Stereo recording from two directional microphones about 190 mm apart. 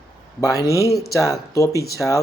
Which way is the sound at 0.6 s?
15° left (ahead or behind).